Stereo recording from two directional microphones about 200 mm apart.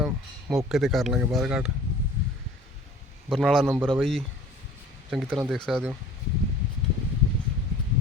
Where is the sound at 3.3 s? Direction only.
Centre (ahead or behind).